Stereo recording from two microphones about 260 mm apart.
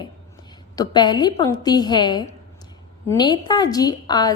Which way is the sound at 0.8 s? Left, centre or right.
Centre.